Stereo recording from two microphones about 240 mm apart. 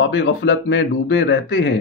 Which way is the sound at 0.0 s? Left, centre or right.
Left.